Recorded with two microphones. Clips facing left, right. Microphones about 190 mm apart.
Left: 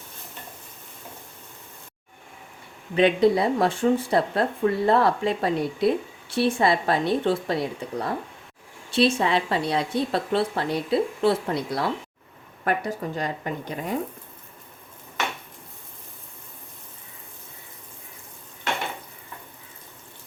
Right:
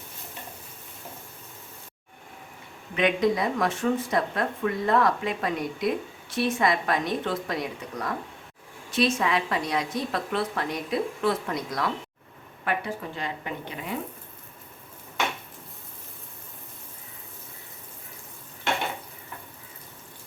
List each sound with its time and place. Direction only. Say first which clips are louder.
2.9 s speech: left 5 dB; 30° left (ahead or behind)
12.6 s speech: left 4 dB; 40° left (ahead or behind)